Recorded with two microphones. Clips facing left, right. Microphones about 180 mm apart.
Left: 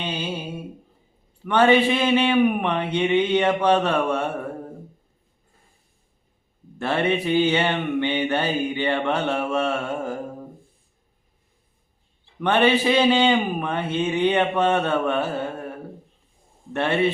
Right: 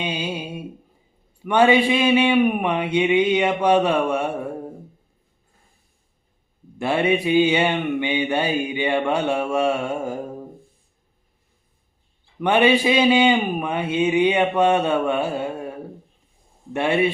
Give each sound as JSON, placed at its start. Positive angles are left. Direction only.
{"t": 0.0, "sound": "a sound", "side_deg": -15}
{"t": 1.4, "sound": "mantra", "side_deg": -10}
{"t": 6.7, "sound": "mantra", "side_deg": -10}
{"t": 12.4, "sound": "mantra", "side_deg": -10}
{"t": 16.7, "sound": "mantra", "side_deg": -10}